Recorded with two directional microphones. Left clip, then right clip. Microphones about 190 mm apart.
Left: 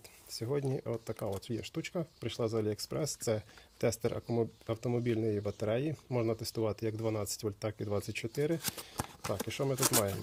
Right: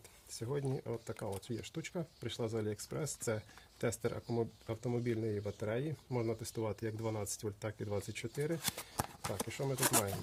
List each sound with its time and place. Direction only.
0.3 s speech: 30° left (ahead or behind)
8.6 s speech: 5° left (ahead or behind)
9.5 s speech: 35° left (ahead or behind)